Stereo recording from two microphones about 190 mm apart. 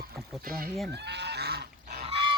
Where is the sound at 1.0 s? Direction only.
60° right (ahead or behind).